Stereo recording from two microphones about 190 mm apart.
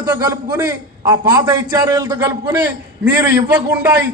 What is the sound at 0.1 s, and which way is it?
A man's voice, 15° right (ahead or behind).